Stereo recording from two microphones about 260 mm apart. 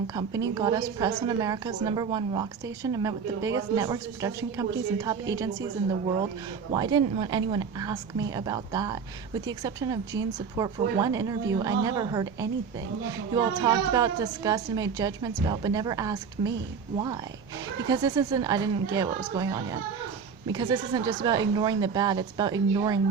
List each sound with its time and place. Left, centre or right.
0.1 s a woman's voice: centre
6.7 s a woman's voice: centre
17.8 s a woman's voice: centre